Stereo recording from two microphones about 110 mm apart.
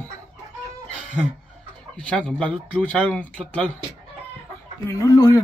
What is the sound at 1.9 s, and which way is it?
Speech, 10° left (ahead or behind).